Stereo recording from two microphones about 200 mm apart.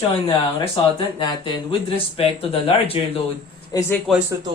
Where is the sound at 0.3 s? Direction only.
25° left (ahead or behind).